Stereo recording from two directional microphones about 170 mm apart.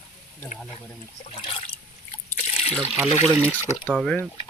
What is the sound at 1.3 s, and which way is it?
Trickle, 30° left (ahead or behind).